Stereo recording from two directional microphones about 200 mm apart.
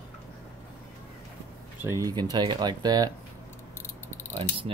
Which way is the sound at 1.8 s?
15° right (ahead or behind).